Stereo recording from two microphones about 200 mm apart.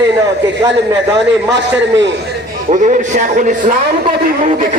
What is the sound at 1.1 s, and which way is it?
Speech, 60° right (ahead or behind).